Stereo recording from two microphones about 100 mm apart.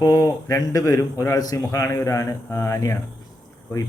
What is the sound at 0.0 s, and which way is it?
A man's voice, 35° left (ahead or behind).